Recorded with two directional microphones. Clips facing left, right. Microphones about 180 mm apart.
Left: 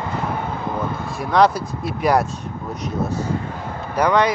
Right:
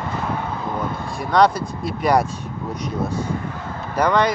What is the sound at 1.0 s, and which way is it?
Speech, 5° left (ahead or behind).